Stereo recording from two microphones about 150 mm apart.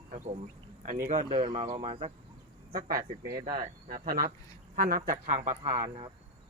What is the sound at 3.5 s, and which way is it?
Speech, 75° right (ahead or behind).